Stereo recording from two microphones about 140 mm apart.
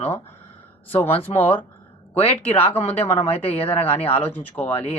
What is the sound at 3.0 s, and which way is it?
Speech, 45° left (ahead or behind).